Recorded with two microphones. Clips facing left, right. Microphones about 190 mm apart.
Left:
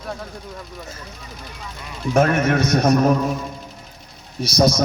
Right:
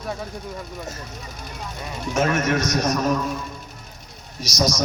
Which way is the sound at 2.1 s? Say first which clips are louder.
Left 4 dB; 60° left (ahead or behind).